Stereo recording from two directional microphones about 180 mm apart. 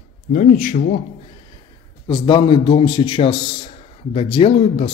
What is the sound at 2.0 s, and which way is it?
Speech, 25° left (ahead or behind).